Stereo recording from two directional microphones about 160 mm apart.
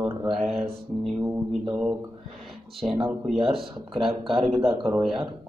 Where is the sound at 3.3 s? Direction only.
Centre (ahead or behind).